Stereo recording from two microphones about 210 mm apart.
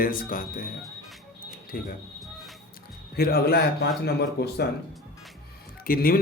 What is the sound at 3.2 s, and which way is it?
A man's voice, 50° left (ahead or behind).